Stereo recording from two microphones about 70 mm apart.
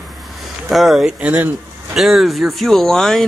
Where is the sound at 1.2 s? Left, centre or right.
Right.